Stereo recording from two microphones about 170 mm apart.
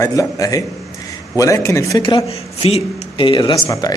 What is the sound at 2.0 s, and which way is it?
Speech, 30° left (ahead or behind).